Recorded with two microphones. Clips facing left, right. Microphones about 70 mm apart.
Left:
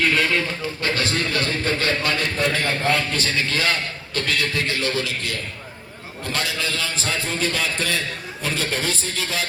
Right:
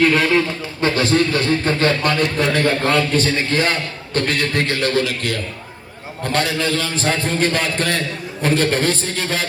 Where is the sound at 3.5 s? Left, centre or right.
Right.